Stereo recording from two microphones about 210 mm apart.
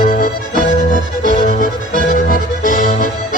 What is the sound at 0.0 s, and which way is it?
Accordion, 40° left (ahead or behind).